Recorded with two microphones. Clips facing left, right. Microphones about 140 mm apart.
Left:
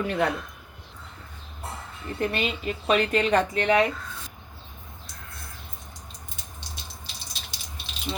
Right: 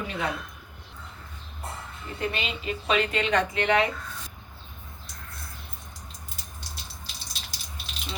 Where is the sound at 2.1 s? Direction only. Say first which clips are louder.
Left 4 dB; 50° left (ahead or behind).